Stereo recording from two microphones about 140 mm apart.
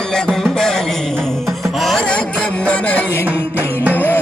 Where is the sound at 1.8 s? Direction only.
Centre (ahead or behind).